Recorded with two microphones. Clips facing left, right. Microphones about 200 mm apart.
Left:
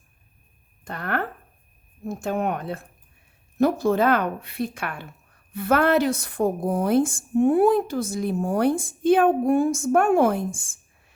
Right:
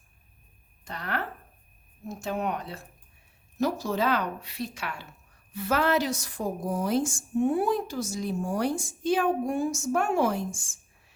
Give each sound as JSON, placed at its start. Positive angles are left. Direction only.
{"t": 0.9, "sound": "a woman's voice", "side_deg": 50}